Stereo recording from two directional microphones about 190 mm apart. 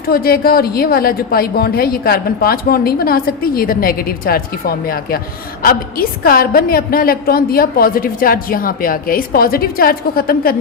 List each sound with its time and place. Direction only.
0.1 s a woman's voice: 50° left (ahead or behind)